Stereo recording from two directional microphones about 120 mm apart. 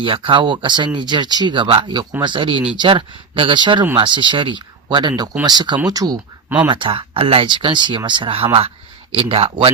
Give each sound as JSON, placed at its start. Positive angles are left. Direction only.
{"t": 0.0, "sound": "speech", "side_deg": -45}
{"t": 6.7, "sound": "speech", "side_deg": -45}